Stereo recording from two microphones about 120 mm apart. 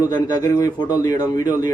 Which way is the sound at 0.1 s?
30° left (ahead or behind).